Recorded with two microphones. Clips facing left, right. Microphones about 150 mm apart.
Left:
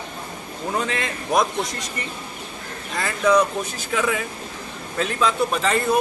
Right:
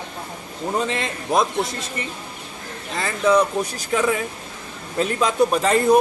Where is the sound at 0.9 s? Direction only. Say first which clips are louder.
Right 1 dB; 25° right (ahead or behind).